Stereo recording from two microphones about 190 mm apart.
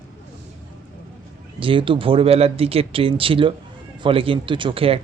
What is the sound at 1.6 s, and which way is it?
Speech, 25° right (ahead or behind).